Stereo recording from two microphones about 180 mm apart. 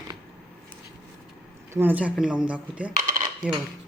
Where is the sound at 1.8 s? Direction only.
10° right (ahead or behind).